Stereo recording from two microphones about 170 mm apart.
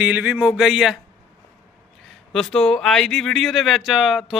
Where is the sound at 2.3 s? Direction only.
5° left (ahead or behind).